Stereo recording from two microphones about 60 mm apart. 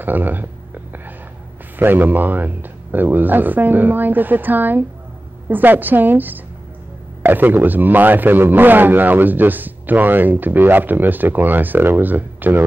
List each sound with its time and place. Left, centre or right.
0.0 s a man's voice: right
1.8 s a man's voice: right